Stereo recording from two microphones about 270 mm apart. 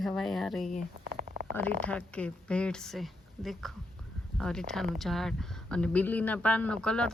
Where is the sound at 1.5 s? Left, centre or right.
Centre.